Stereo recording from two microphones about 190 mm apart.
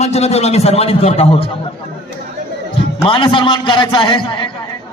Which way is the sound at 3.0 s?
25° left (ahead or behind).